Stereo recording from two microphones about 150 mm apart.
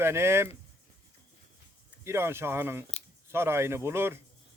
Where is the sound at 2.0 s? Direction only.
15° right (ahead or behind).